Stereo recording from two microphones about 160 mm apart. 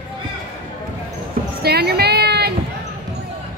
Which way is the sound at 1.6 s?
80° right.